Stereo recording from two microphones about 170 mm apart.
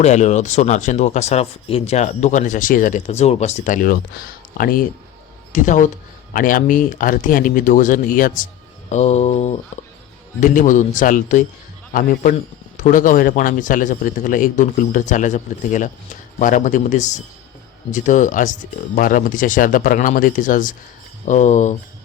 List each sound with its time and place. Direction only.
0.0 s speech: 45° left (ahead or behind)
8.9 s mantra: 40° left (ahead or behind)
10.4 s speech: 50° left (ahead or behind)